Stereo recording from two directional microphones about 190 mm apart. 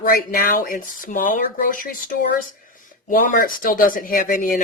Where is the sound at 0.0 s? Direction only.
50° left (ahead or behind).